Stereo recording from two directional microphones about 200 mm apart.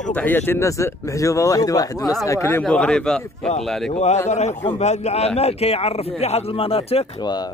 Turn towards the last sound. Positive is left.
turn(degrees=25)  # may be behind; listen again after turning